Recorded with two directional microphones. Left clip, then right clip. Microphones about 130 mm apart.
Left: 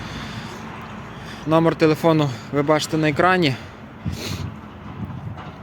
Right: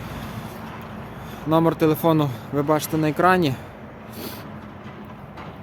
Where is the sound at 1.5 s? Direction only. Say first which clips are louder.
Left 2 dB; centre (ahead or behind).